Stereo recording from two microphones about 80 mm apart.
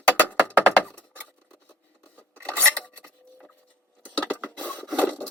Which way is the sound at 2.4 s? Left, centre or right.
Right.